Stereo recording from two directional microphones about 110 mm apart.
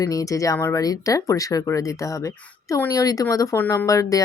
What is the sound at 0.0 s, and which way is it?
Speech, 30° left (ahead or behind).